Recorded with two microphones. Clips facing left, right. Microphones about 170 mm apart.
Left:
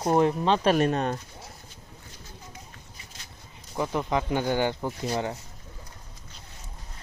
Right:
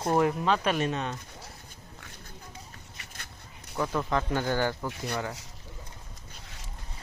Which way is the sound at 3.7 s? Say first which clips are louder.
Left 2 dB; 15° left (ahead or behind).